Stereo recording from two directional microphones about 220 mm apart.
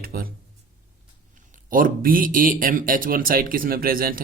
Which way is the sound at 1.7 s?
40° right (ahead or behind).